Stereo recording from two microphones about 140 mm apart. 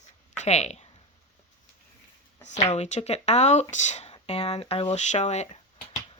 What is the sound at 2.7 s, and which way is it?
Speech, 55° left (ahead or behind).